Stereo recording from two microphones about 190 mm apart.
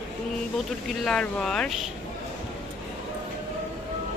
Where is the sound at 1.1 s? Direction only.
5° left (ahead or behind).